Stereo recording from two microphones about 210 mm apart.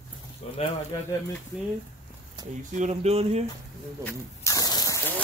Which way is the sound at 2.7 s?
30° right (ahead or behind).